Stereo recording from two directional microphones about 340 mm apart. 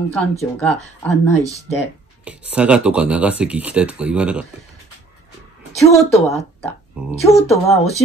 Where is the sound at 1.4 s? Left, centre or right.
Centre.